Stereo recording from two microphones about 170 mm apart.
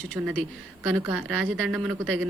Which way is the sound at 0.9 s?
5° right (ahead or behind).